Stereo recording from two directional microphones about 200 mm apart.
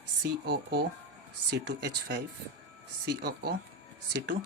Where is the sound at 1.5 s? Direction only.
60° right (ahead or behind).